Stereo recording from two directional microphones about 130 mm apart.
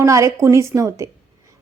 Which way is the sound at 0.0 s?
25° right (ahead or behind).